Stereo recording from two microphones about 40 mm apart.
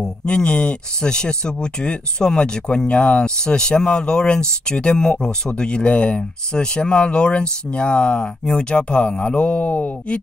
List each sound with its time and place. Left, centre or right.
0.0 s speech: left